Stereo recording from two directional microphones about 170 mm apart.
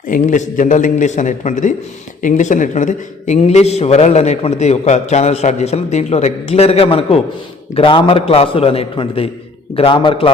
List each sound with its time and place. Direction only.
0.1 s a man's voice: 50° left (ahead or behind); by 10.3 s 30° left (ahead or behind)